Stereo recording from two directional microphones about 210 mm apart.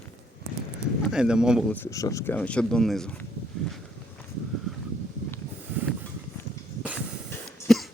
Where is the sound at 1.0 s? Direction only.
5° right (ahead or behind).